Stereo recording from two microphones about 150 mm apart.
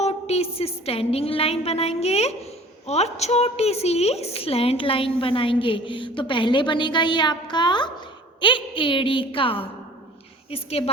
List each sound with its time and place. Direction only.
0.0 s a woman's voice: 45° left (ahead or behind)